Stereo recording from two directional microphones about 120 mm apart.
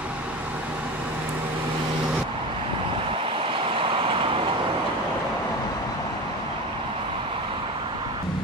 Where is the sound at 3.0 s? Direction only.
50° right (ahead or behind).